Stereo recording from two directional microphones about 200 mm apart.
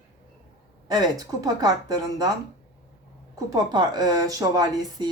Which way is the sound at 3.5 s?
20° right (ahead or behind).